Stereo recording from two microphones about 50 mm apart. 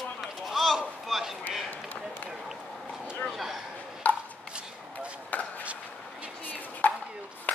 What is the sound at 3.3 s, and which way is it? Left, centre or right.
Speech, centre.